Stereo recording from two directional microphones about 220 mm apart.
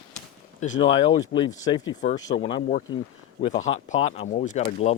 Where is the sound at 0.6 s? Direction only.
30° left (ahead or behind).